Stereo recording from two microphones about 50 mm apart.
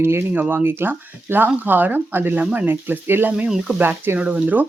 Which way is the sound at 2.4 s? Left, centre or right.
Right.